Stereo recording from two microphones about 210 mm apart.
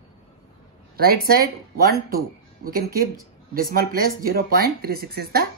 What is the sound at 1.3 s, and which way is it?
Speech, 45° right (ahead or behind).